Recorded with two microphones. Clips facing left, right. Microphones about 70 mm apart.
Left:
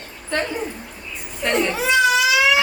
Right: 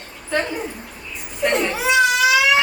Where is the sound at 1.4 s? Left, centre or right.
Centre.